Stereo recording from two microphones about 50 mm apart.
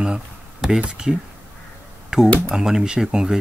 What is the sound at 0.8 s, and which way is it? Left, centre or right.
Speech, centre.